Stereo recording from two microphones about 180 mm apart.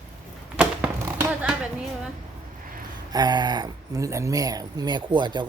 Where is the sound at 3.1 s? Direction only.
20° right (ahead or behind).